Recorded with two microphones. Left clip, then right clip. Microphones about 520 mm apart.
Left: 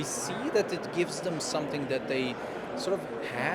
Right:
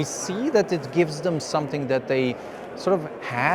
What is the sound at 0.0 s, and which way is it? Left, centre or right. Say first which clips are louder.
Speech: right 6 dB; right.